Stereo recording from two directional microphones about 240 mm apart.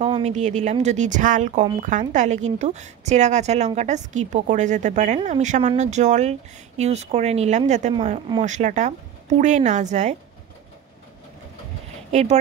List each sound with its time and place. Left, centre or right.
0.0 s a woman's voice: right
12.1 s speech: right